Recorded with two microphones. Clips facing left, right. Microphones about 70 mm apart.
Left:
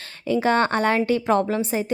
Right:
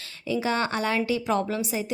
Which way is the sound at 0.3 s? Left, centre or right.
Left.